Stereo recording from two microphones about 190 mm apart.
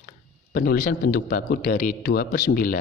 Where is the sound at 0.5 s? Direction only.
55° left (ahead or behind).